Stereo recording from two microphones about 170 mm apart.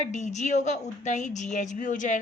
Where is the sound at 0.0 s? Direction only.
45° left (ahead or behind).